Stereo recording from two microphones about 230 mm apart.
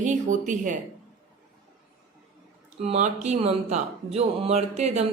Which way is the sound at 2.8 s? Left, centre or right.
Right.